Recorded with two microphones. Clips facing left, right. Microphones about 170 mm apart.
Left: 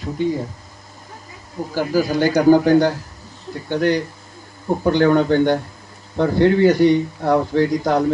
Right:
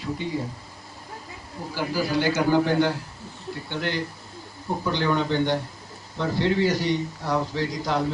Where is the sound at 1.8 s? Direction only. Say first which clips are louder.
Left 7 dB; 45° left (ahead or behind).